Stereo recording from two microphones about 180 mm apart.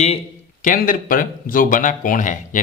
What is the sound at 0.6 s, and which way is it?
Speech, 50° left (ahead or behind).